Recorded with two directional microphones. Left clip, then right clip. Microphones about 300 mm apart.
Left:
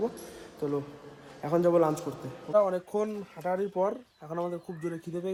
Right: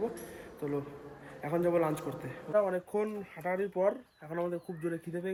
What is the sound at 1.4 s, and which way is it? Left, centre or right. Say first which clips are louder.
Speech: left 5 dB; centre.